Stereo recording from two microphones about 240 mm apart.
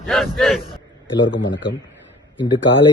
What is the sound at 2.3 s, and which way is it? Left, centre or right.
Speech, centre.